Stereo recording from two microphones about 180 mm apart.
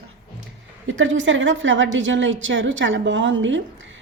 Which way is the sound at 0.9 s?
90° right.